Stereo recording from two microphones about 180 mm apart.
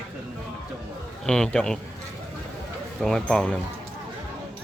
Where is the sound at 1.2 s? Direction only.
5° left (ahead or behind).